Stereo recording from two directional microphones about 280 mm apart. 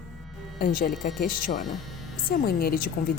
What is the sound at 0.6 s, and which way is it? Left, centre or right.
A woman's voice, left.